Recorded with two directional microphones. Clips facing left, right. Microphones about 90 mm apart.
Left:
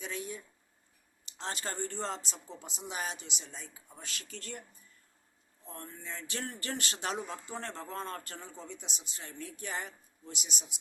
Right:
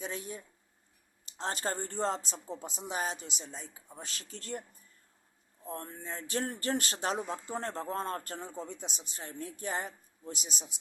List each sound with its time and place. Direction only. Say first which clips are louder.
0.0 s a sound: even; 35° right (ahead or behind)
1.2 s speech: right 4 dB; 40° right (ahead or behind)
5.6 s speech: right 4 dB; 40° right (ahead or behind)